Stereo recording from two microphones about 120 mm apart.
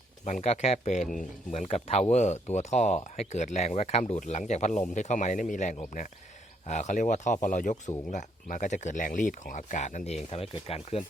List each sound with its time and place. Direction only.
0.3 s speech: 70° left (ahead or behind)
1.1 s speech: 90° left
6.7 s speech: 80° left